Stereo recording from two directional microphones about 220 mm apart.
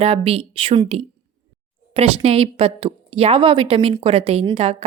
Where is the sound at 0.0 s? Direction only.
25° right (ahead or behind).